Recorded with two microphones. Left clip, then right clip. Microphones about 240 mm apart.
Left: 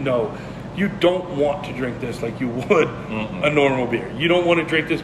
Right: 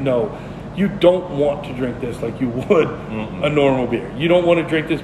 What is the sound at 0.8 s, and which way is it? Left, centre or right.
A man's voice, centre.